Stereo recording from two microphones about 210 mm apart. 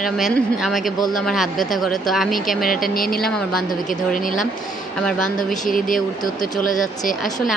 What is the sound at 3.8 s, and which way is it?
Speech, 40° left (ahead or behind).